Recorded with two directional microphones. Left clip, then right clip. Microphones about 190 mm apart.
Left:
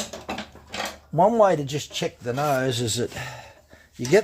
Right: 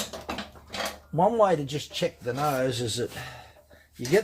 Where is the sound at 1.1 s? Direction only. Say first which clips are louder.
Left 4 dB; 45° left (ahead or behind).